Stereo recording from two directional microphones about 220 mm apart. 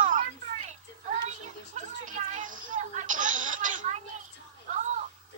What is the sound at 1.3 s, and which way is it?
Music, 35° right (ahead or behind).